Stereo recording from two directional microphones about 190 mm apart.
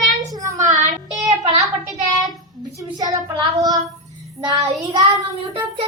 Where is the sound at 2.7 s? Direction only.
20° right (ahead or behind).